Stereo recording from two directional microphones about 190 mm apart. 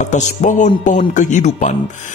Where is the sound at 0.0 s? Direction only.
40° left (ahead or behind).